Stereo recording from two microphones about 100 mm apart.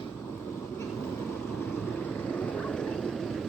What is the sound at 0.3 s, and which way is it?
Vehicle, 20° left (ahead or behind).